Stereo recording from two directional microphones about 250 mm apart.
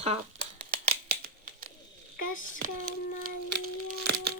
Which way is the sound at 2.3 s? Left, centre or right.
Left.